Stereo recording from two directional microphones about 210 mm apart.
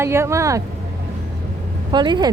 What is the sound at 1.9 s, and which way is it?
Speech, 20° right (ahead or behind).